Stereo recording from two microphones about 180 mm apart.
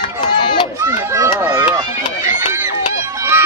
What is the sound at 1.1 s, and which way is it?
Chop, 15° right (ahead or behind).